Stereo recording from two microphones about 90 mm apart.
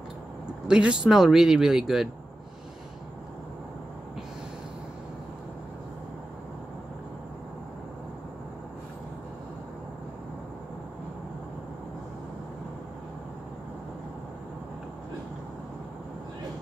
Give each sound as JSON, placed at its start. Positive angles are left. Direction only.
{"t": 0.7, "sound": "speech", "side_deg": -10}